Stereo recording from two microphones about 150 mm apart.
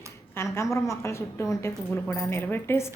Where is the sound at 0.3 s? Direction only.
20° left (ahead or behind).